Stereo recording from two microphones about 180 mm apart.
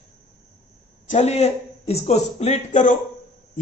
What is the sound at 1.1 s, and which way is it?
A man's voice, 35° left (ahead or behind).